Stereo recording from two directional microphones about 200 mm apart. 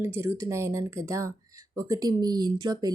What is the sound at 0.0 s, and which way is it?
Speech, 15° right (ahead or behind).